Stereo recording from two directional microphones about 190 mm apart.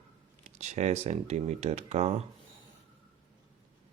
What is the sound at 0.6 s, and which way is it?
Speech, 35° right (ahead or behind).